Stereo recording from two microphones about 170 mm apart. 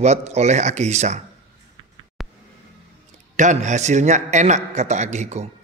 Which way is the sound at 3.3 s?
45° right (ahead or behind).